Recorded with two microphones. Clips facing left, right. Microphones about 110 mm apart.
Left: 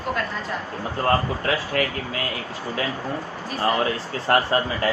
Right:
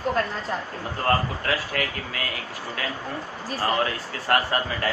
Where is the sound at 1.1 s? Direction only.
25° left (ahead or behind).